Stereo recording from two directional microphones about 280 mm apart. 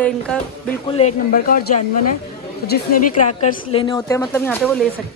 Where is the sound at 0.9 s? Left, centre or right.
Left; by 4.8 s centre.